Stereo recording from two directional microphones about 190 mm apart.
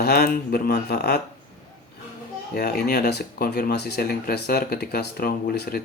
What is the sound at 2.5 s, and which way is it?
Speech, 50° left (ahead or behind).